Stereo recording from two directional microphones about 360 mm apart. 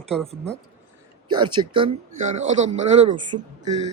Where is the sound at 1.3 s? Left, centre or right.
Centre.